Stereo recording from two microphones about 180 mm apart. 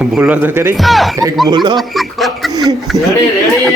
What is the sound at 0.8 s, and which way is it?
Speech, centre (ahead or behind).